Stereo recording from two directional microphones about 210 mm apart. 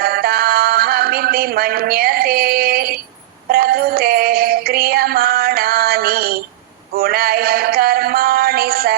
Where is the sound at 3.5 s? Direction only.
45° right (ahead or behind).